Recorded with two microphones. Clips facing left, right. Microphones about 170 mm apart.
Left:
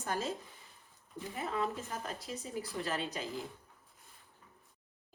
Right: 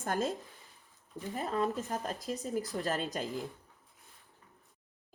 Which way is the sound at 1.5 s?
40° right (ahead or behind).